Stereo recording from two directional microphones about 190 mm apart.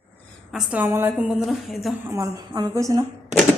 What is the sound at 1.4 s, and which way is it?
Speech, centre (ahead or behind).